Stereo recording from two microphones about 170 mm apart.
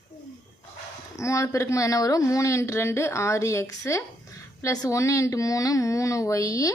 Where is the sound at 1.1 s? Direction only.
20° left (ahead or behind).